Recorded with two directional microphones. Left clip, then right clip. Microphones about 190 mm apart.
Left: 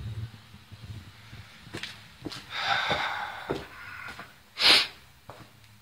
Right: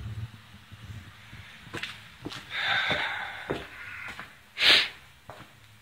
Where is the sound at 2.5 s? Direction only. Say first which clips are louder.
Even; 25° left (ahead or behind).